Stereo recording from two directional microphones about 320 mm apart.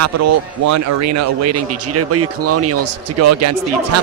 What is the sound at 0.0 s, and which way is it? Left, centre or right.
A man's voice, right.